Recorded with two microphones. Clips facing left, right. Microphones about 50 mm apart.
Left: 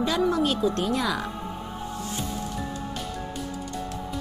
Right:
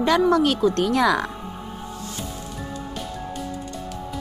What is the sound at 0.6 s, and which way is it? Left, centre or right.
Speech, right.